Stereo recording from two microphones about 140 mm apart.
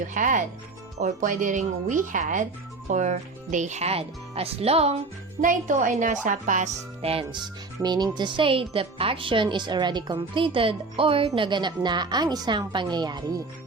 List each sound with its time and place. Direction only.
0.1 s speech: 70° right (ahead or behind); by 4.9 s 45° right (ahead or behind)
5.4 s speech: 70° right (ahead or behind)
7.0 s speech: 45° right (ahead or behind)